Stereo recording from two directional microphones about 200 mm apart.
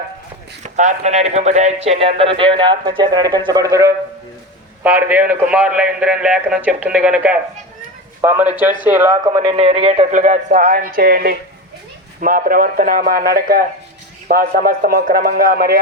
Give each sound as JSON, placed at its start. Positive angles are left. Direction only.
{"t": 0.6, "sound": "a man's voice", "side_deg": -35}